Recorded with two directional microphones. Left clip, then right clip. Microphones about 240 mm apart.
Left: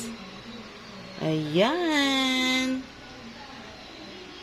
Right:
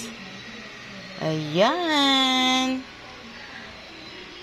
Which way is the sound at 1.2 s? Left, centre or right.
Centre.